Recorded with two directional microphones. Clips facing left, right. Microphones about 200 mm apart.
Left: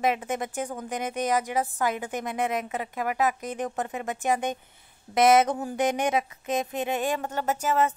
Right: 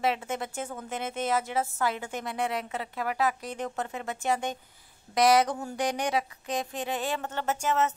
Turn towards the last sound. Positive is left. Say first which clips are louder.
# left 2 dB
turn(degrees=10)  # may be behind; listen again after turning